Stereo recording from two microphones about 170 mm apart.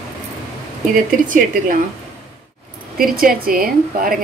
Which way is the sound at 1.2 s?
50° right (ahead or behind).